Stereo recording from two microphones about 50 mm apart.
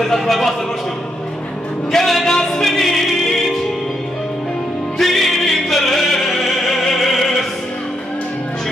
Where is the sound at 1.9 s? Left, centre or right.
Centre.